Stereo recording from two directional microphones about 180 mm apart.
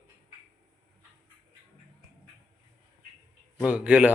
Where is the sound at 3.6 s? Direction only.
5° right (ahead or behind).